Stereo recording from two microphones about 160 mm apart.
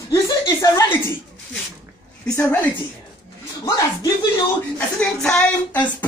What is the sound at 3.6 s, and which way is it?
Speech, 25° left (ahead or behind).